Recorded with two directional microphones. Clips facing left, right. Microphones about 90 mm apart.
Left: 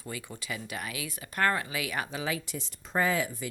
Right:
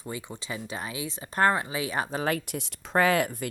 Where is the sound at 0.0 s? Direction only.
20° right (ahead or behind).